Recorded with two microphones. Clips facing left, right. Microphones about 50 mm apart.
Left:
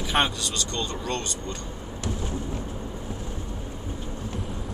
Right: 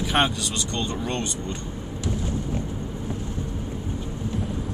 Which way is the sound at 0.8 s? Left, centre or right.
Right.